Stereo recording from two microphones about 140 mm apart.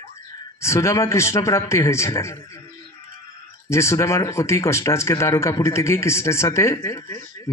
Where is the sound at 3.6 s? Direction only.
20° left (ahead or behind).